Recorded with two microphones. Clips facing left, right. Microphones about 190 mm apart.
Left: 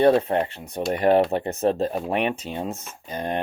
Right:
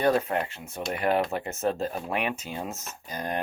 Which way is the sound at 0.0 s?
30° left (ahead or behind).